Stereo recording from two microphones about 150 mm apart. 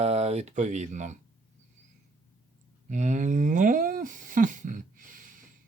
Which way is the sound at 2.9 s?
55° right (ahead or behind).